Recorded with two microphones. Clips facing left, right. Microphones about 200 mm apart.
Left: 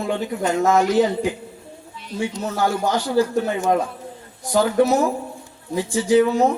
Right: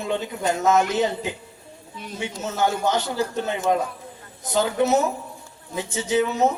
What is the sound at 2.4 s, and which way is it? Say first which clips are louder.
A man's voice: even; 20° right (ahead or behind).